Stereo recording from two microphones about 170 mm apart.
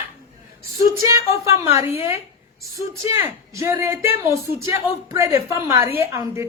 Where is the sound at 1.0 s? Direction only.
20° right (ahead or behind).